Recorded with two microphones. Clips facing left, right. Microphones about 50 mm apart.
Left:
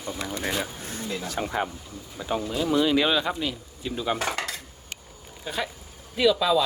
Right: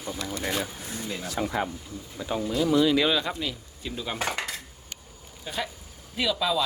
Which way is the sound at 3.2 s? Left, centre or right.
Left.